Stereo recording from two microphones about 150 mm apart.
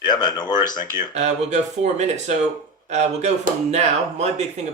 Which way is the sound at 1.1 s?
50° right (ahead or behind).